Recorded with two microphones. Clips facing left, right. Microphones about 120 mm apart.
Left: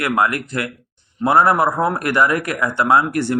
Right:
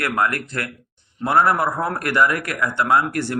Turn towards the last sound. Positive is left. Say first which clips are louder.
# left 3 dB
turn(degrees=25)  # may be behind; listen again after turning